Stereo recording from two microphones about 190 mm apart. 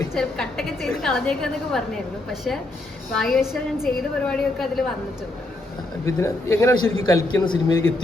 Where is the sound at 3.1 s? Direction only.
Centre (ahead or behind).